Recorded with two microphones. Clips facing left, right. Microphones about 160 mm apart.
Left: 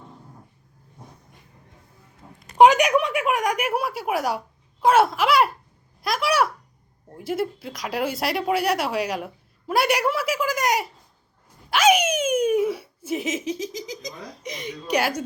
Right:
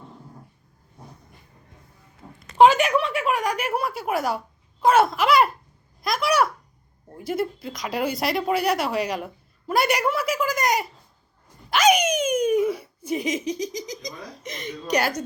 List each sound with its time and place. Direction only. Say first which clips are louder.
2.6 s a sound: left 1 dB; 15° left (ahead or behind)
3.3 s speech: left 1 dB; centre (ahead or behind)
6.0 s babbling: even; 5° left (ahead or behind)
7.2 s speech: even; 5° left (ahead or behind)